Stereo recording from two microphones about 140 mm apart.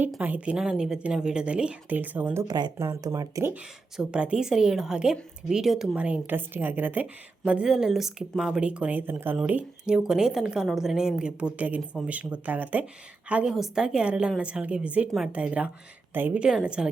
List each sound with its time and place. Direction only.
0.2 s a woman's voice: 10° right (ahead or behind)
3.5 s a woman's voice: 5° right (ahead or behind)